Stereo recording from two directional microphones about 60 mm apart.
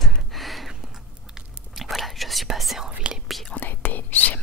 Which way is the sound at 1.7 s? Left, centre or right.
Centre.